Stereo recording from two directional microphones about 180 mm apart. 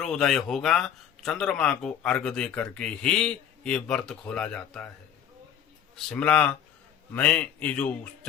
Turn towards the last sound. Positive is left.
turn(degrees=10)  # may be behind; listen again after turning